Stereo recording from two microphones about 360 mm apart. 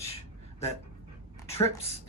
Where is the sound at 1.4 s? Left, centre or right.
Centre.